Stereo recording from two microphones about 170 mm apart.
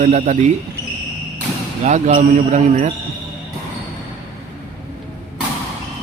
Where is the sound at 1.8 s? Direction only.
40° right (ahead or behind).